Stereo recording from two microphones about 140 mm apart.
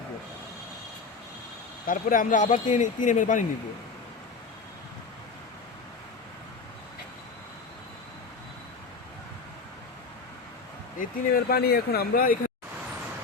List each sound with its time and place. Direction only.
1.9 s speech: 70° left (ahead or behind)
10.9 s speech: 85° left